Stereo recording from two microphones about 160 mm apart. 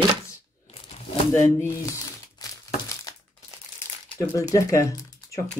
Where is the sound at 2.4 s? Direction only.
25° left (ahead or behind).